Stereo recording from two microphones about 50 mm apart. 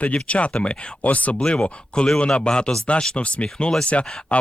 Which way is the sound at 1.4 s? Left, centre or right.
Centre.